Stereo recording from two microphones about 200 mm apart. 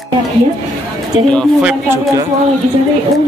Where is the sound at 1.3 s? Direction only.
Centre (ahead or behind).